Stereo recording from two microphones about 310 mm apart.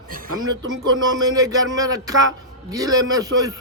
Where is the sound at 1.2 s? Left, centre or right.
Centre.